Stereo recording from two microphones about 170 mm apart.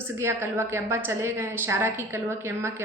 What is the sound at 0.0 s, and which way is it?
A woman's voice, 15° right (ahead or behind).